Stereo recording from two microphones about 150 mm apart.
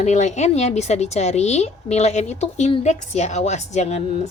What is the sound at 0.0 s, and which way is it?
A woman's voice, 50° left (ahead or behind).